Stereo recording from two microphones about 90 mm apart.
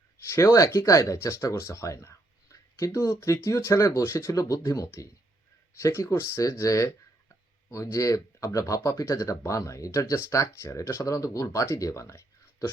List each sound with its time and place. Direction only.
0.3 s speech: 35° left (ahead or behind)